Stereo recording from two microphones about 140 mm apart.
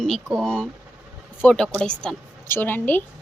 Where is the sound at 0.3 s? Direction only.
5° left (ahead or behind).